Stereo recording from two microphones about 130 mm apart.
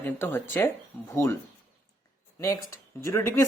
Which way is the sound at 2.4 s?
25° left (ahead or behind).